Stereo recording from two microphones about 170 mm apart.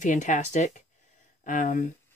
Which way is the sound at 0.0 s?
50° left (ahead or behind).